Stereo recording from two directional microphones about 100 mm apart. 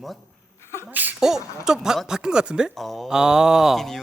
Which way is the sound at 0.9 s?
15° right (ahead or behind).